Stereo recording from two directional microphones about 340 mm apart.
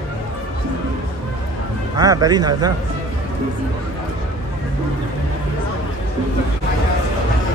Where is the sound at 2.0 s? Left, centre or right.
Centre.